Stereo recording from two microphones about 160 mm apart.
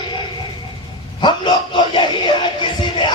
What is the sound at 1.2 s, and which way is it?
Music, 30° left (ahead or behind).